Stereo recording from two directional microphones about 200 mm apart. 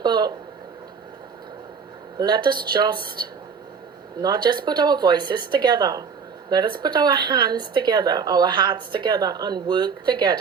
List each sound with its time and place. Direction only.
0.0 s speech: 20° right (ahead or behind)
2.1 s speech: 20° right (ahead or behind)
4.2 s speech: 20° right (ahead or behind)